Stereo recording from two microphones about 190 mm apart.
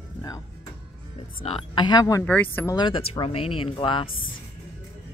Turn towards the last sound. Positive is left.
turn(degrees=25)  # may be behind; listen again after turning